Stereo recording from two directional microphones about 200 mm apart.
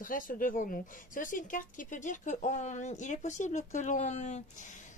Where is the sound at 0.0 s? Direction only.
45° left (ahead or behind).